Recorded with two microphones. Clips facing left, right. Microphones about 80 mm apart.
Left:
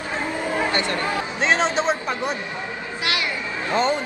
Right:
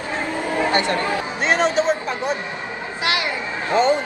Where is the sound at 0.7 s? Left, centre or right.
Right.